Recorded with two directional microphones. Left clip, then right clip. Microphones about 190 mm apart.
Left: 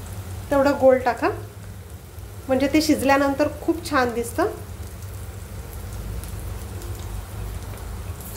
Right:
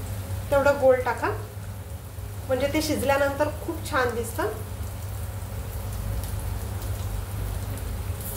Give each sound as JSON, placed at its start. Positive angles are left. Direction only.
{"t": 0.7, "sound": "a woman's voice", "side_deg": 45}
{"t": 2.5, "sound": "a woman's voice", "side_deg": 50}